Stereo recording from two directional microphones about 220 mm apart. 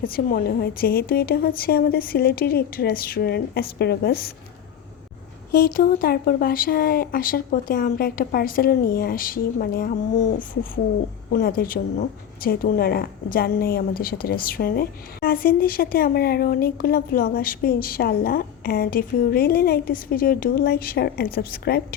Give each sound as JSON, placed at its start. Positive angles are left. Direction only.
{"t": 0.0, "sound": "a woman's voice", "side_deg": 40}
{"t": 5.5, "sound": "a woman's voice", "side_deg": 40}